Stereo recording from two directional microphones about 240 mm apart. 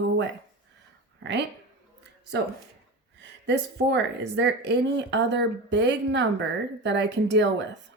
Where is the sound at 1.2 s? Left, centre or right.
Right.